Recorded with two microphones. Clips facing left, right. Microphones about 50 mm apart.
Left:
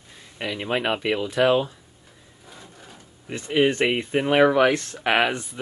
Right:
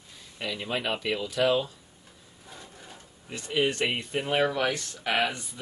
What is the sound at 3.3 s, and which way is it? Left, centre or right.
Speech, left.